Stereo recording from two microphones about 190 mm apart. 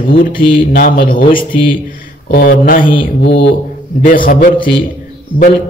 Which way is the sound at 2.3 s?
50° left (ahead or behind).